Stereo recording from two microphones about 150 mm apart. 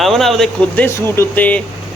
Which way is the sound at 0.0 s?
Centre (ahead or behind).